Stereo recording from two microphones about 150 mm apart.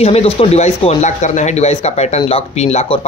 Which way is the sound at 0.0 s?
45° left (ahead or behind).